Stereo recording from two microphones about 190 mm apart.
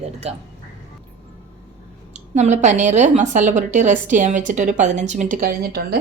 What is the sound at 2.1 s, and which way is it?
A woman's voice, 35° right (ahead or behind).